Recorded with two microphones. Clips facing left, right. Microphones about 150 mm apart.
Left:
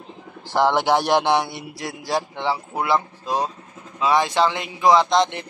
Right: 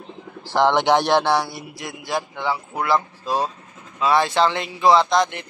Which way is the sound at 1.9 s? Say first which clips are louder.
Left 2 dB; 35° left (ahead or behind).